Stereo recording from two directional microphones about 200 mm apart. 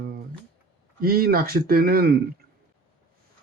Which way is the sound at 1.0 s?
50° right (ahead or behind).